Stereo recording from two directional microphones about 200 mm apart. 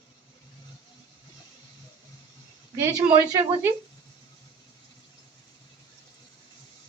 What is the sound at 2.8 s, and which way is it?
Speech, 15° right (ahead or behind).